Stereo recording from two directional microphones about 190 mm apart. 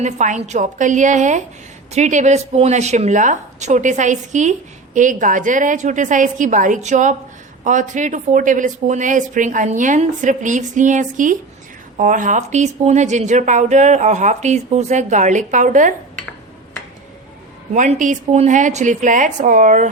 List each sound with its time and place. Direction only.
0.0 s a woman's voice: 40° right (ahead or behind)
17.7 s a woman's voice: 40° right (ahead or behind)